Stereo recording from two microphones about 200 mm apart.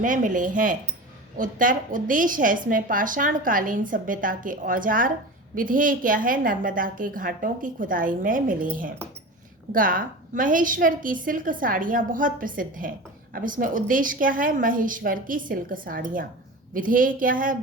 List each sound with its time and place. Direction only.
0.0 s a woman's voice: 40° right (ahead or behind)
9.7 s a woman's voice: 45° right (ahead or behind)